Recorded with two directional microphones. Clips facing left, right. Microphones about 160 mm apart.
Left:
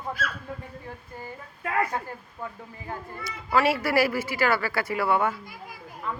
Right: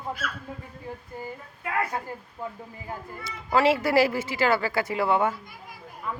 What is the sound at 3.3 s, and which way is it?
A woman's voice, 25° right (ahead or behind).